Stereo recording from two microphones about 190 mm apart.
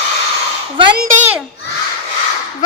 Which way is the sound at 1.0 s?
45° right (ahead or behind).